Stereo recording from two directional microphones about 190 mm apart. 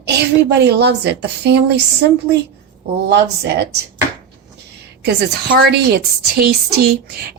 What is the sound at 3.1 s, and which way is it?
Speech, 65° right (ahead or behind).